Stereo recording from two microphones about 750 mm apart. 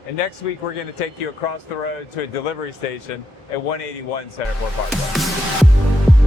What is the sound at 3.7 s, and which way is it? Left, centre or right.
Speech, left.